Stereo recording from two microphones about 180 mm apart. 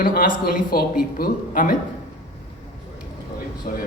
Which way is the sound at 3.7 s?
45° left (ahead or behind).